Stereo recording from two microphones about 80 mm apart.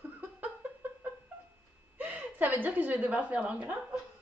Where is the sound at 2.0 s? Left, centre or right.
Right.